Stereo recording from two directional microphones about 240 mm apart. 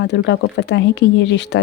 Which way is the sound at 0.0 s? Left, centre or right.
Left.